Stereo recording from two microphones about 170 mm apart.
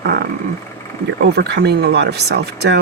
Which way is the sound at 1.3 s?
75° right (ahead or behind).